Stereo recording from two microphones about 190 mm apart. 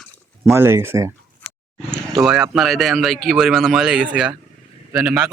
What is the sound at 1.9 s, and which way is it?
Speech, 5° right (ahead or behind).